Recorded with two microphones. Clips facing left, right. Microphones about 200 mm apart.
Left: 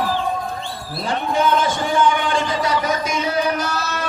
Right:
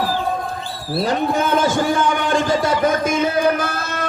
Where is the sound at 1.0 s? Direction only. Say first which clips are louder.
Even; 45° right (ahead or behind).